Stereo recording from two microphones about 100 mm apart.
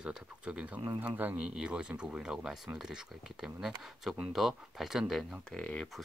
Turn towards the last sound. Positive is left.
turn(degrees=10)  # may be behind; listen again after turning